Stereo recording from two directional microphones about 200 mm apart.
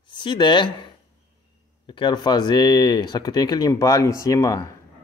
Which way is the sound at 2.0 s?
20° left (ahead or behind).